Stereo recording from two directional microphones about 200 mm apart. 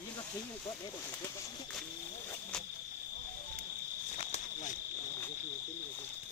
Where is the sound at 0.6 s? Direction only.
20° left (ahead or behind).